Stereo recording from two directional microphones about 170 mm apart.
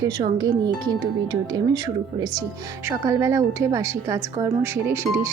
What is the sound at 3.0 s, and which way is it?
A woman's voice, 15° right (ahead or behind).